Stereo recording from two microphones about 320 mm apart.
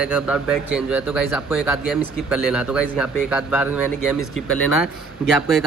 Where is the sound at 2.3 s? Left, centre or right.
Centre.